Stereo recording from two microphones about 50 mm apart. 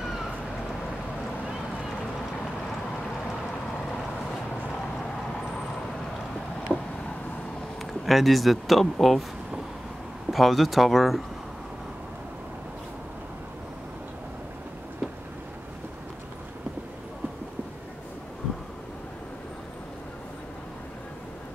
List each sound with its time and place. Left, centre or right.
6.7 s a sound: centre
7.8 s speech: centre
10.3 s speech: centre